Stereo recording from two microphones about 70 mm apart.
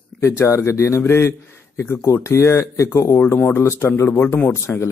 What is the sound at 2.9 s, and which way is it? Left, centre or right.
Speech, left.